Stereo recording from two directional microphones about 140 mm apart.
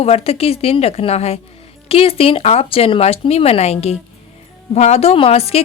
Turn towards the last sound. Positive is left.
turn(degrees=45)  # may be behind; listen again after turning